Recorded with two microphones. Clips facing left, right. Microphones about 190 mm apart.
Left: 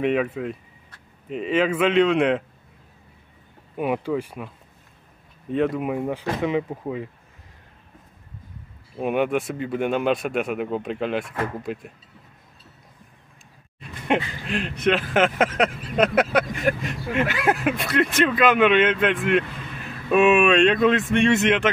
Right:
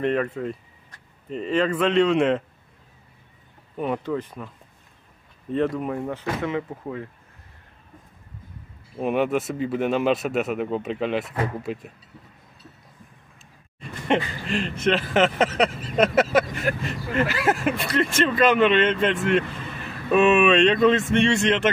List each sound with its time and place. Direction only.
0.0 s speech: 5° left (ahead or behind)
3.7 s speech: 10° left (ahead or behind)
5.5 s speech: centre (ahead or behind)
8.9 s speech: centre (ahead or behind)
13.7 s speech: 5° left (ahead or behind)